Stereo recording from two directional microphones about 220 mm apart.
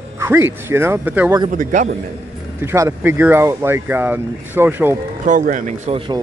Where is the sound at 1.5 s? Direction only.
35° right (ahead or behind).